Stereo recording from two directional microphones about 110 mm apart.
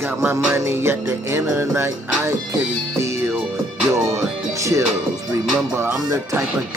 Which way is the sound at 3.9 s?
25° right (ahead or behind).